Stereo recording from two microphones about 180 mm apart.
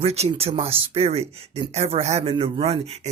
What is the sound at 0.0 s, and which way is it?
Speech, 35° right (ahead or behind).